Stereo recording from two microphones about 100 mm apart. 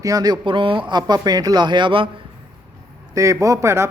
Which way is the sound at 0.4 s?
55° right (ahead or behind).